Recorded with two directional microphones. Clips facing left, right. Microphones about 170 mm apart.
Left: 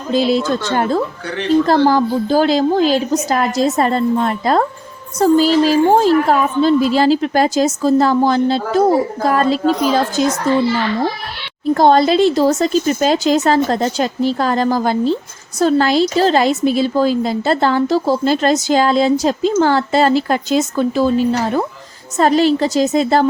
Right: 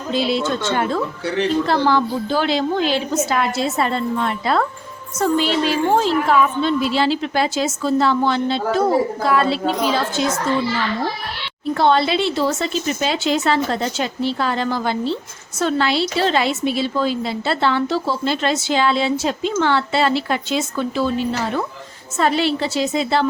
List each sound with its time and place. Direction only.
0.1 s speech: 40° left (ahead or behind)
11.7 s speech: 40° left (ahead or behind)